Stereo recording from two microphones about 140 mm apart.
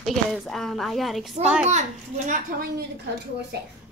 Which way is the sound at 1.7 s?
60° right (ahead or behind).